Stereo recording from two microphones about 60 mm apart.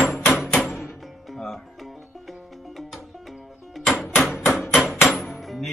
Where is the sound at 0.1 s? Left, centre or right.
Left.